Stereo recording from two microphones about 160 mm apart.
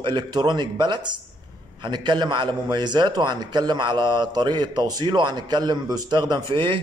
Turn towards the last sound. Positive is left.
turn(degrees=-30)  # may be behind; listen again after turning